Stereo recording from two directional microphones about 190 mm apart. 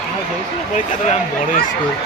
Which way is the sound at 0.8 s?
40° left (ahead or behind).